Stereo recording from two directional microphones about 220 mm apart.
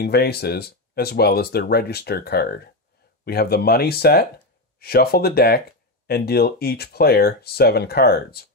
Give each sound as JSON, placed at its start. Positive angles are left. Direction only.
{"t": 0.0, "sound": "speech", "side_deg": 45}